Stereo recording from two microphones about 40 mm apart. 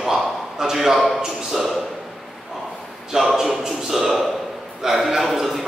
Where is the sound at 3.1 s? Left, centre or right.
Centre.